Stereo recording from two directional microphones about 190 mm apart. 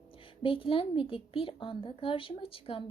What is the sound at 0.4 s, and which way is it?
Speech, 25° left (ahead or behind).